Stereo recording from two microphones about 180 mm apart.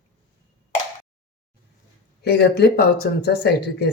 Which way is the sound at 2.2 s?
65° left (ahead or behind).